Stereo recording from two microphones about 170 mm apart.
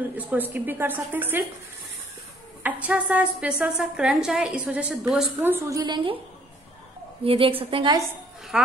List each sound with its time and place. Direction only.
0.2 s a woman's voice: 10° right (ahead or behind)
2.6 s a woman's voice: 10° right (ahead or behind)
5.8 s a woman's voice: 25° right (ahead or behind)
7.2 s a woman's voice: 30° right (ahead or behind)
8.5 s speech: 5° right (ahead or behind)